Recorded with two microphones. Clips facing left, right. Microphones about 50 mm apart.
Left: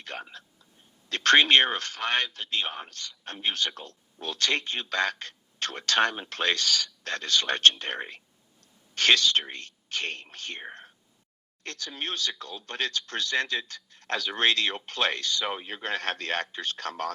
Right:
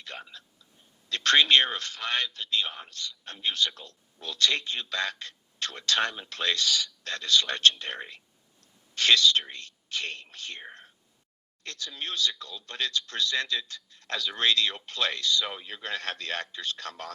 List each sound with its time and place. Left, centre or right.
0.0 s a sound: left
1.1 s a man's voice: left
11.6 s a man's voice: left